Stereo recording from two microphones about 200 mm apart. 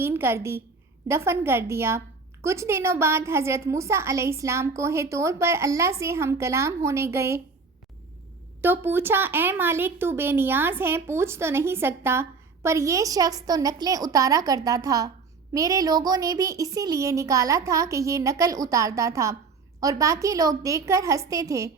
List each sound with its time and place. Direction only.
0.0 s a woman's voice: 10° right (ahead or behind)
8.6 s a woman's voice: 10° right (ahead or behind)